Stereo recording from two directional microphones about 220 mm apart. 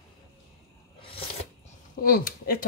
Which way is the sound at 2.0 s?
40° left (ahead or behind).